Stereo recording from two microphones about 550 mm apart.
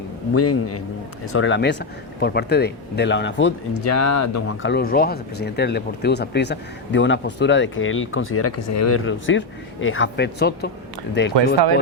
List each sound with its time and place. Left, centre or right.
0.3 s speech: left
4.7 s speech: centre